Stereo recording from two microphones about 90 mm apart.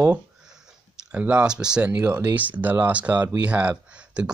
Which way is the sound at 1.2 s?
10° right (ahead or behind).